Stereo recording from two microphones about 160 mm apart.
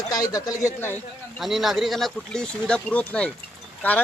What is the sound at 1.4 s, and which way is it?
Speech, centre (ahead or behind).